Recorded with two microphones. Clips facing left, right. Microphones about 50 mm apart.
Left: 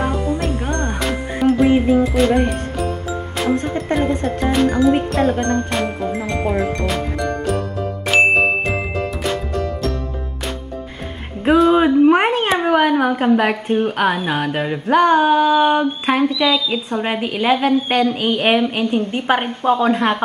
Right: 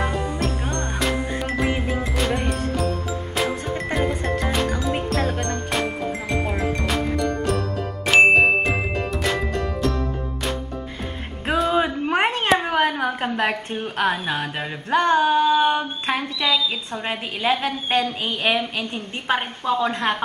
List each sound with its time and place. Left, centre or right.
0.7 s music: left
0.9 s music: centre
2.0 s speech: centre
3.9 s speech: centre
5.3 s speech: left
6.2 s speech: centre
8.1 s ding: centre
11.4 s speech: centre
12.6 s a sound: centre
18.0 s speech: left
19.8 s a sound: centre